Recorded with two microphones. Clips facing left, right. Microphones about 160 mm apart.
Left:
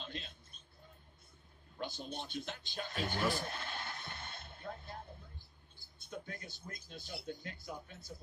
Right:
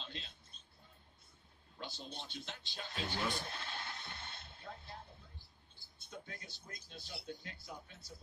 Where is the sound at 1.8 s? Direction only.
50° left (ahead or behind).